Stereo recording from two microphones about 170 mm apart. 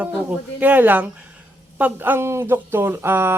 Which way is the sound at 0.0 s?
10° right (ahead or behind).